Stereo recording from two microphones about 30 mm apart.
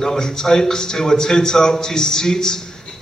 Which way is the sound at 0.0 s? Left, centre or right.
Centre.